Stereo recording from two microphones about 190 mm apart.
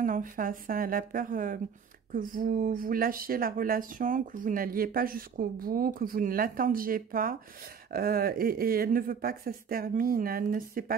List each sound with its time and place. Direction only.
0.0 s speech: 45° right (ahead or behind)